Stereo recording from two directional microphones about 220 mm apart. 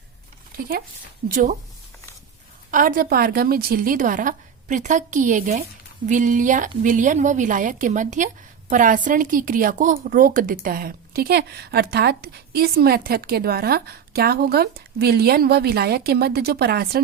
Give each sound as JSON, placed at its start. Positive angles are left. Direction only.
{"t": 1.3, "sound": "a woman's voice", "side_deg": -40}
{"t": 2.6, "sound": "a woman's voice", "side_deg": -40}